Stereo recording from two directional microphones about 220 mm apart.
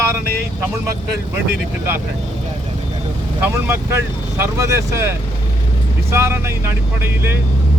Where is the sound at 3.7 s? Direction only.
10° right (ahead or behind).